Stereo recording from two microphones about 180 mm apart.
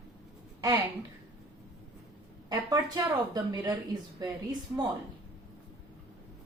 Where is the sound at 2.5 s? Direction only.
20° right (ahead or behind).